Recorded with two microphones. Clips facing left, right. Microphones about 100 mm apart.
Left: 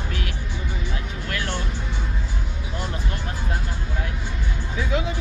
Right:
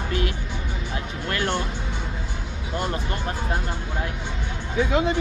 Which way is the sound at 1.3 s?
50° right (ahead or behind).